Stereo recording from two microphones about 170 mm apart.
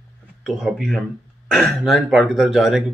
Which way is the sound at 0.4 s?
Centre (ahead or behind).